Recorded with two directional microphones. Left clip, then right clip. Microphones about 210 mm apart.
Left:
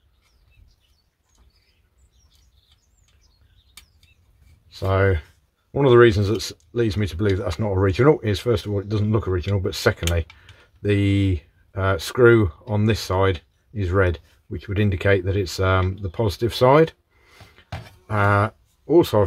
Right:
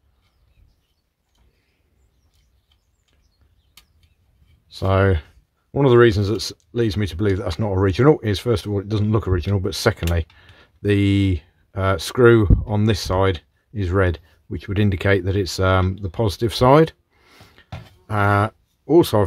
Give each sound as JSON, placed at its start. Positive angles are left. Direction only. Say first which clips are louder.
{"t": 4.6, "sound": "speech", "louder": "right 2 dB", "side_deg": -25}